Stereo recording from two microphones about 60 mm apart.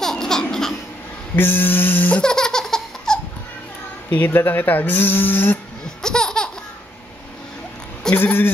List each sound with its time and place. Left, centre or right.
0.0 s a sound: centre
1.3 s a sound: left
2.1 s laughter: centre
4.1 s speech: left
6.0 s laughter: centre
8.1 s speech: left